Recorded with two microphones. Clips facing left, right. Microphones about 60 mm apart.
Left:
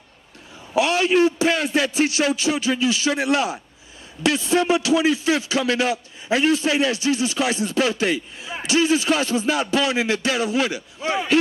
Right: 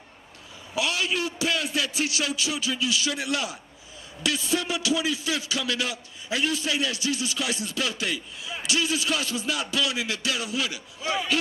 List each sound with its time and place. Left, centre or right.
0.7 s a man's voice: left